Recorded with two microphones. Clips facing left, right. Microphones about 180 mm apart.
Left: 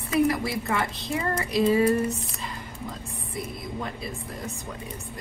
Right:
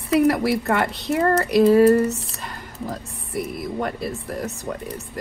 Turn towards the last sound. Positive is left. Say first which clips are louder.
# right 7 dB
turn(degrees=-70)  # may be behind; listen again after turning